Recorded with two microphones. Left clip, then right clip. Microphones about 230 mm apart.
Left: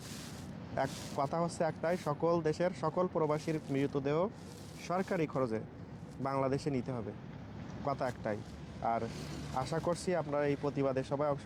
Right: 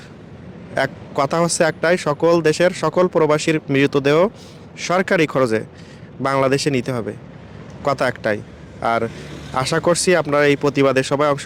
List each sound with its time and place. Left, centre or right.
0.8 s speech: right